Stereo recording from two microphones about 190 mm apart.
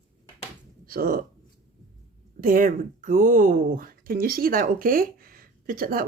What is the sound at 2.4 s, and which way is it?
Speech, 45° right (ahead or behind).